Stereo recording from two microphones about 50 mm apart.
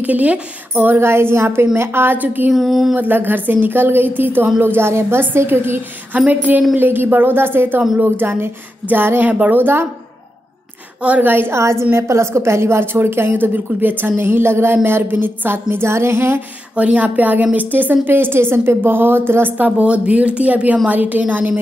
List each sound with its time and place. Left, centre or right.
0.0 s a woman's voice: right
0.9 s a woman's voice: right
2.5 s speech: centre
3.0 s a woman's voice: right
6.1 s a woman's voice: right
6.8 s speech: right
9.3 s a woman's voice: right
11.0 s a woman's voice: right
11.2 s speech: right
11.5 s a woman's voice: right
13.3 s speech: right
16.7 s a woman's voice: right
19.8 s a woman's voice: right